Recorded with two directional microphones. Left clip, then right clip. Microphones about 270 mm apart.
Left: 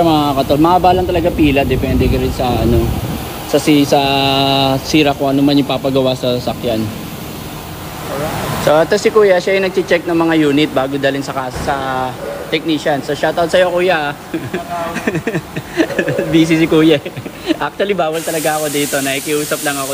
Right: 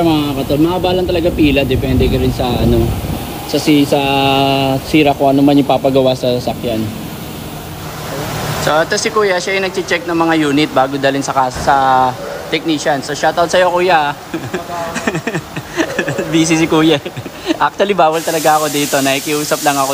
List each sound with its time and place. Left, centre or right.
0.0 s speech: centre
0.8 s speech: centre
3.5 s speech: centre
5.9 s speech: centre
8.6 s speech: centre
15.0 s speech: right
15.8 s speech: centre